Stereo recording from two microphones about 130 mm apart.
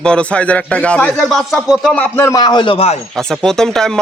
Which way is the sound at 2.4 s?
35° left (ahead or behind).